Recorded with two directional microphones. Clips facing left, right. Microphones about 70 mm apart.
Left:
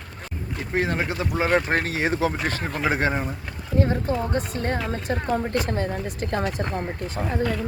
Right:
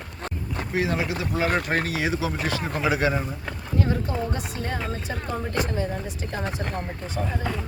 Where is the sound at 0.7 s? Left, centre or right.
Left.